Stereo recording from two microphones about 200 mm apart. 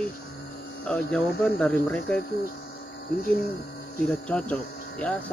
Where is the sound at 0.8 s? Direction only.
5° left (ahead or behind).